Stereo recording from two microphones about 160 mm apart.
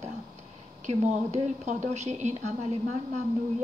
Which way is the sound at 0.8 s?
45° right (ahead or behind).